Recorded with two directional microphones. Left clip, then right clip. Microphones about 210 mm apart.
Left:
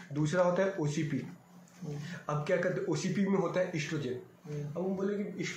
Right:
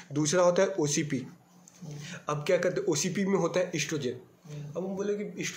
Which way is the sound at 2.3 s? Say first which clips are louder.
Right 4 dB; 40° right (ahead or behind).